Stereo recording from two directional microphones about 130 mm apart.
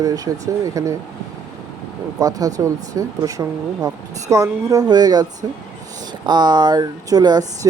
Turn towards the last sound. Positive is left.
turn(degrees=-30)  # may be behind; listen again after turning